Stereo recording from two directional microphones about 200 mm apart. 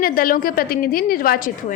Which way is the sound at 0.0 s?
45° left (ahead or behind).